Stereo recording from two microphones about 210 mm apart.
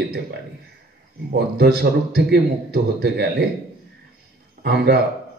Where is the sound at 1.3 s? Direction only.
50° right (ahead or behind).